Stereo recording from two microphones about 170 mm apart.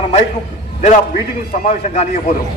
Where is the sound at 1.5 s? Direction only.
45° left (ahead or behind).